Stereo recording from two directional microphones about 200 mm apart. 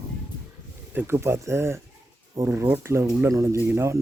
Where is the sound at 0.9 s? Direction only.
10° right (ahead or behind).